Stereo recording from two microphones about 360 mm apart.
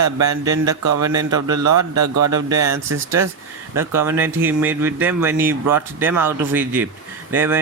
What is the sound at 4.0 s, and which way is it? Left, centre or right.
Speech, centre.